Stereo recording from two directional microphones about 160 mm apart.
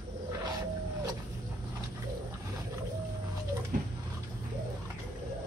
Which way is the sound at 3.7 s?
60° right (ahead or behind).